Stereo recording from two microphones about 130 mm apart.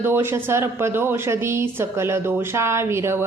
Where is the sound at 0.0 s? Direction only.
15° right (ahead or behind).